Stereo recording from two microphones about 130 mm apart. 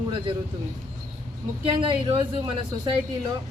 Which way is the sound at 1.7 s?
40° right (ahead or behind).